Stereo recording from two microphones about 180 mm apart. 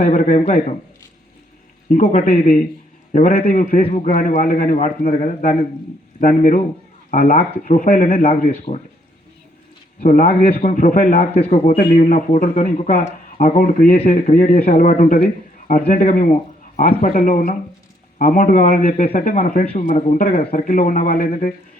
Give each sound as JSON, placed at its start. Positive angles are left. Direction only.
{"t": 0.0, "sound": "speech", "side_deg": 50}
{"t": 1.9, "sound": "speech", "side_deg": 45}
{"t": 7.3, "sound": "speech", "side_deg": 35}
{"t": 7.6, "sound": "speech", "side_deg": 45}
{"t": 8.1, "sound": "speech", "side_deg": 35}
{"t": 10.0, "sound": "speech", "side_deg": 40}
{"t": 12.5, "sound": "speech", "side_deg": 35}
{"t": 13.5, "sound": "speech", "side_deg": 50}